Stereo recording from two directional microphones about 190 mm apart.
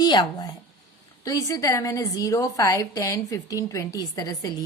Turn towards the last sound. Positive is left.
turn(degrees=20)  # may be behind; listen again after turning